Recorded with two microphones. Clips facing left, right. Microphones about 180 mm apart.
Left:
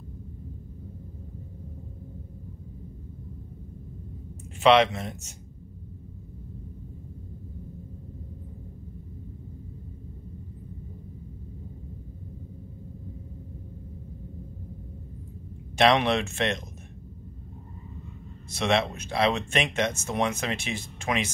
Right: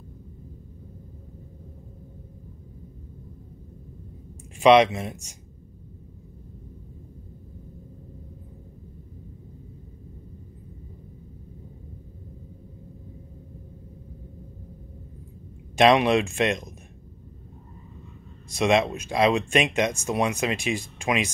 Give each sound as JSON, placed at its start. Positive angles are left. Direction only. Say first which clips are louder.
{"t": 4.6, "sound": "speech", "louder": "right 3 dB", "side_deg": -15}
{"t": 15.8, "sound": "speech", "louder": "right 3 dB", "side_deg": -15}
{"t": 18.5, "sound": "speech", "louder": "right 4 dB", "side_deg": -15}